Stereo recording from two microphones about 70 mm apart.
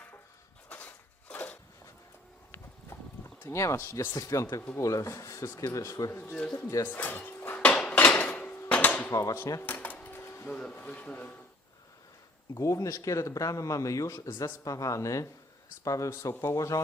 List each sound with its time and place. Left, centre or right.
0.7 s a sound: left
2.9 s clip-clop: left
3.5 s speech: left
6.3 s speech: centre
6.8 s dishes: left
7.6 s dishes: centre
7.9 s hammer: left
9.0 s speech: left
9.6 s a sound: left
10.2 s printer: left
10.4 s speech: centre
12.5 s speech: left